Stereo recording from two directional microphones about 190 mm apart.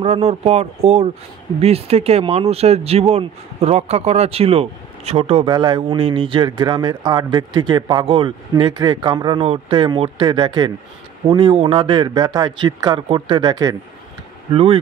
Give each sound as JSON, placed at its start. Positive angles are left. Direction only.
{"t": 0.0, "sound": "speech", "side_deg": -35}
{"t": 14.5, "sound": "speech", "side_deg": -30}